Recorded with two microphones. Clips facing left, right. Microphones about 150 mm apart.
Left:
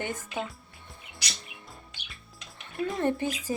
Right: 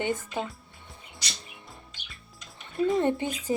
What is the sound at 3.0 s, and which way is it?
Speech, 20° right (ahead or behind).